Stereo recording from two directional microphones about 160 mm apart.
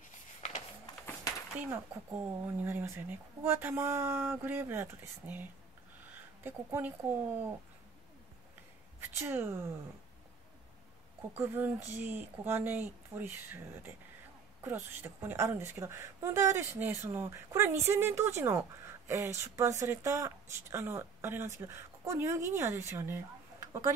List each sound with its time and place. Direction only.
1.6 s a woman's voice: 10° right (ahead or behind)
9.2 s a woman's voice: 15° right (ahead or behind)
11.3 s a woman's voice: 15° right (ahead or behind)